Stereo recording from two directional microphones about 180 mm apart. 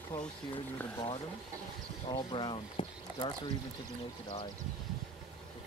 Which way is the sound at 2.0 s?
25° left (ahead or behind).